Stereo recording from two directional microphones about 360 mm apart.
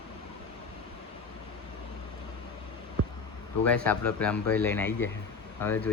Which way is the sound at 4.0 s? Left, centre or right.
Centre.